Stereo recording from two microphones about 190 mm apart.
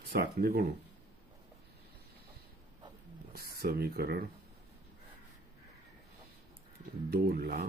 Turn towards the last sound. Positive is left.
turn(degrees=-50)  # may be behind; listen again after turning